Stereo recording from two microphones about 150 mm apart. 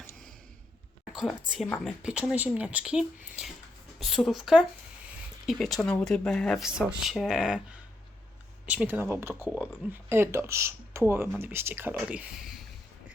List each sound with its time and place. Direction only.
1.1 s a woman's voice: 5° right (ahead or behind)
2.0 s speech: 5° right (ahead or behind)
8.6 s speech: 10° right (ahead or behind)